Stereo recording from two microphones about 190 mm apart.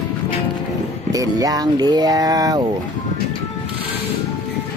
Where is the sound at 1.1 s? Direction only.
20° right (ahead or behind).